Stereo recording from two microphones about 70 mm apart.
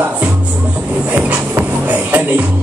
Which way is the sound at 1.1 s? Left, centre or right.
Centre.